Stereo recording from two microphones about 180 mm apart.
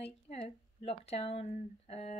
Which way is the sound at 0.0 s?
35° left (ahead or behind).